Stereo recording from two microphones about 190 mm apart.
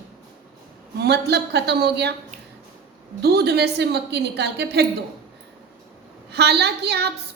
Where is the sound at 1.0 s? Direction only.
60° right (ahead or behind).